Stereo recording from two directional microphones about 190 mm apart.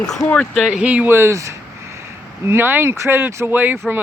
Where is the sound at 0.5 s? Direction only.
Centre (ahead or behind).